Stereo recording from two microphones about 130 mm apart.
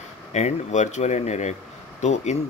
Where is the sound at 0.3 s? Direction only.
60° left (ahead or behind).